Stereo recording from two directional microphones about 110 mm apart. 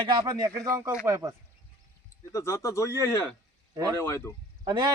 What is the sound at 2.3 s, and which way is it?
Speech, 25° left (ahead or behind).